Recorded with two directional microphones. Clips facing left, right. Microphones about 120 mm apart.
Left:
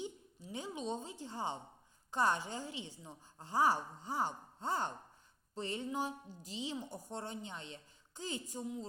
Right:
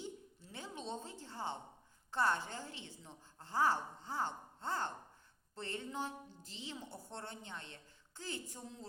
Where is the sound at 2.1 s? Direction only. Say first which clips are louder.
Left 2 dB; 15° left (ahead or behind).